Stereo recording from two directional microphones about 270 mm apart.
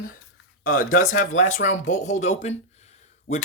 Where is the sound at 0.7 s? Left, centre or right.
Left.